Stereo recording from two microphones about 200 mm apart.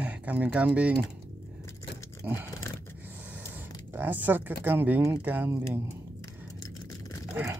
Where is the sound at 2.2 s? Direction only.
5° right (ahead or behind).